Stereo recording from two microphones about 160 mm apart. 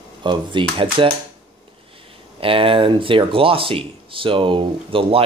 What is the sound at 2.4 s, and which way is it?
Speech, 35° right (ahead or behind).